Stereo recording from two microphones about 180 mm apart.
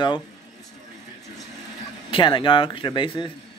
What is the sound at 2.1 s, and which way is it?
Speech, 25° left (ahead or behind).